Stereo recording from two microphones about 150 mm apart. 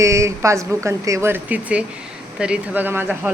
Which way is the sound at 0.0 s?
20° right (ahead or behind).